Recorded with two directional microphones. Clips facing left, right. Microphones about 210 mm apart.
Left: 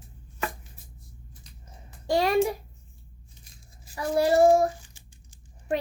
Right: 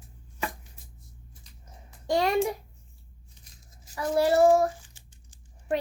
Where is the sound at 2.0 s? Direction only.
10° left (ahead or behind).